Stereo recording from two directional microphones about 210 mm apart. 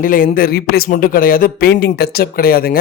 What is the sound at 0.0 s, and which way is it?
Speech, 40° left (ahead or behind).